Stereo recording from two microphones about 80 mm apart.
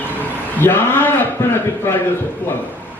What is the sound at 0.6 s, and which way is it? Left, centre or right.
Speech, left.